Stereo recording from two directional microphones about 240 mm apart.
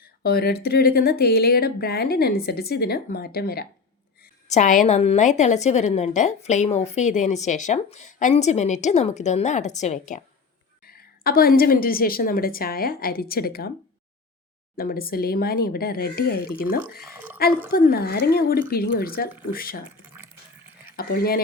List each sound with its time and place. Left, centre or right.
0.2 s a woman's voice: left
14.8 s speech: left
17.1 s a sound: centre
17.7 s speech: left
20.1 s a sound: centre
20.9 s speech: left